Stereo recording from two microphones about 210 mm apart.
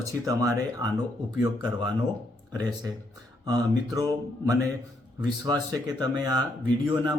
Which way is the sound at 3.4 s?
15° right (ahead or behind).